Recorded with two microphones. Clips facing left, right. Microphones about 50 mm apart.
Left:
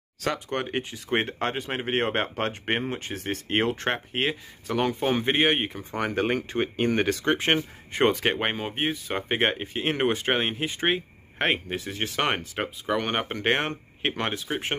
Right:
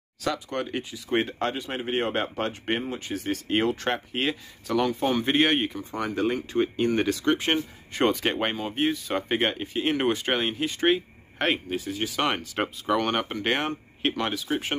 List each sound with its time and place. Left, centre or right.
0.2 s speech: left
5.2 s speech: centre
5.7 s speech: left
8.3 s speech: centre
8.5 s speech: left
11.7 s speech: left
12.2 s speech: left
12.5 s speech: centre
13.3 s speech: left